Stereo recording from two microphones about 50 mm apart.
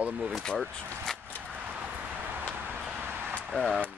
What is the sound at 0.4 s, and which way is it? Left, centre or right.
Speech, centre.